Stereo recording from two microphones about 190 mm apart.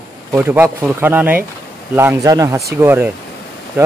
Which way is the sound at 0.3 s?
10° right (ahead or behind).